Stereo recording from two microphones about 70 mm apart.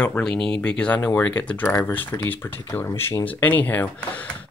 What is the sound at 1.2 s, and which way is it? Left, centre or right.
Speech, left.